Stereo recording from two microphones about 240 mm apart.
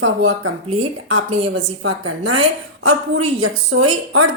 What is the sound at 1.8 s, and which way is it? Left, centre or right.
Speech, right.